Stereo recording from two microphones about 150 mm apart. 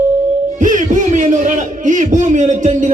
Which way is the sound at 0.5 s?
60° right (ahead or behind).